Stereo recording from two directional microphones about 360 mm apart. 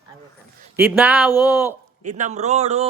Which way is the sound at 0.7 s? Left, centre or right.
Centre.